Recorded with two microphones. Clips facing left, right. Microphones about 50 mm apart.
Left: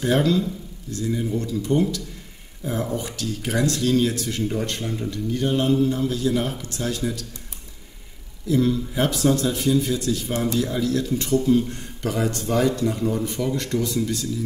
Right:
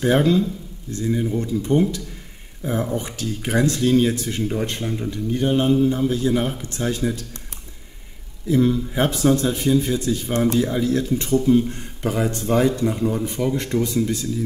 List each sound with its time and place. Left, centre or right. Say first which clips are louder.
0.0 s speech: right 3 dB; right
8.5 s speech: right 2 dB; right